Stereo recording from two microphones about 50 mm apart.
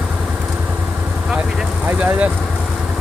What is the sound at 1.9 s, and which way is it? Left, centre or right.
Vehicle, right.